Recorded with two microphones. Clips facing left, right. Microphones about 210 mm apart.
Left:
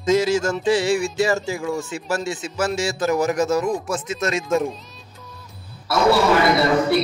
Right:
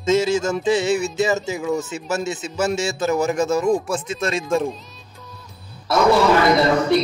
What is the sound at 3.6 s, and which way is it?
Speech, centre (ahead or behind).